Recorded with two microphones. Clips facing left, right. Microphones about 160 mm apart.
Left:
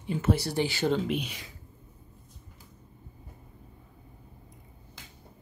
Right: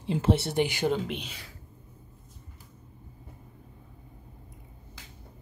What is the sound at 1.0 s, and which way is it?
Speech, 10° left (ahead or behind).